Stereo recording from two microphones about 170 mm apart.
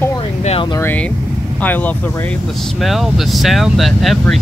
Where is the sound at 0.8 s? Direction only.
10° left (ahead or behind).